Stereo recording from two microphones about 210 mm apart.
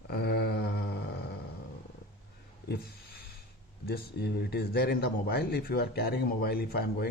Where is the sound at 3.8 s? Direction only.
50° left (ahead or behind).